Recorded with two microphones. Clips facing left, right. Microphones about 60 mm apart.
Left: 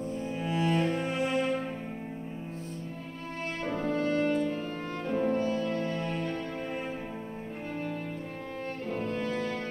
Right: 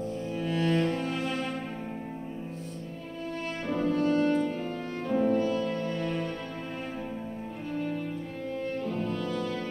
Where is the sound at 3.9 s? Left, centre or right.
Left.